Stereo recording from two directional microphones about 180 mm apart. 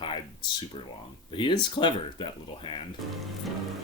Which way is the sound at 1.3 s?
25° left (ahead or behind).